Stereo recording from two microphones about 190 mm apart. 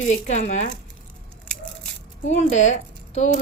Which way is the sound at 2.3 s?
35° left (ahead or behind).